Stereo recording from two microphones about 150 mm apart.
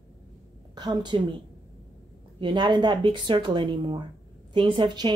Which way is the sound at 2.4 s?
30° right (ahead or behind).